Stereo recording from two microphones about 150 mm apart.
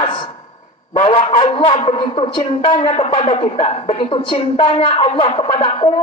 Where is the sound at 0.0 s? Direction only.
35° left (ahead or behind).